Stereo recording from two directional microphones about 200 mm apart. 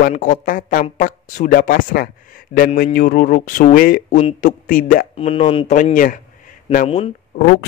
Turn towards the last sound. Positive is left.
turn(degrees=30)  # may be behind; listen again after turning